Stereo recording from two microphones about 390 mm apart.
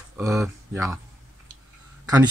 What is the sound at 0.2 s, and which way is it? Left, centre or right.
Speech, centre.